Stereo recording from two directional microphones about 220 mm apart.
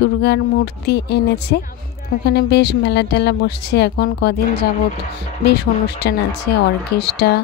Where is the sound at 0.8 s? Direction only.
50° left (ahead or behind).